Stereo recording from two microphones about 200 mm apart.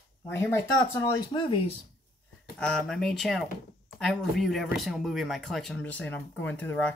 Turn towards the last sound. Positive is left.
turn(degrees=5)  # may be behind; listen again after turning